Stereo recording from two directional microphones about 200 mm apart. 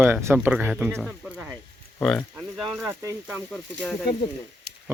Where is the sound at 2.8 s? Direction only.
15° right (ahead or behind).